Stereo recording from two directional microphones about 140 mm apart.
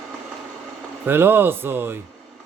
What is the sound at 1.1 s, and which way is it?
Speech, 15° right (ahead or behind).